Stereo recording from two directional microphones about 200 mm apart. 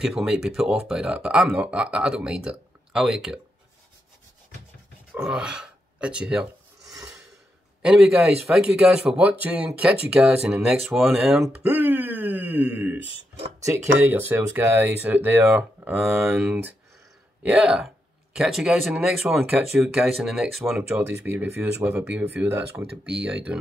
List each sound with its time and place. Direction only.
0.0 s a man's voice: centre (ahead or behind)
5.1 s filing: 5° right (ahead or behind)
7.8 s a man's voice: 5° right (ahead or behind)
13.2 s speech: 20° right (ahead or behind)
13.9 s a man's voice: 10° right (ahead or behind)